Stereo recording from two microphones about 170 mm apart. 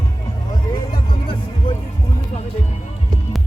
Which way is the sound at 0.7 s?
30° left (ahead or behind).